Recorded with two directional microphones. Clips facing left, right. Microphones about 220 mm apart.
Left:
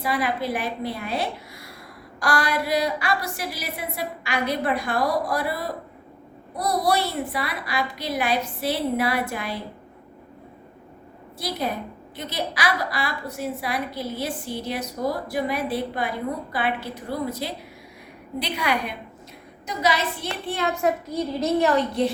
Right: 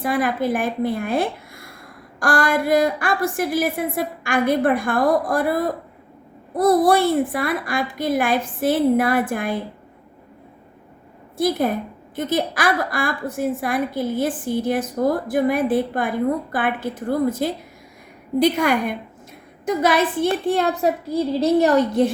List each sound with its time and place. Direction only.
0.0 s a woman's voice: 50° right (ahead or behind)
11.3 s a woman's voice: 50° right (ahead or behind)